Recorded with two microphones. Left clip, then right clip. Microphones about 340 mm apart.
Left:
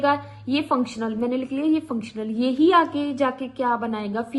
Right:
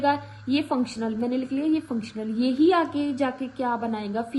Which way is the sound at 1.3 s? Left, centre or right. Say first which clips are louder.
Left 2 dB; left.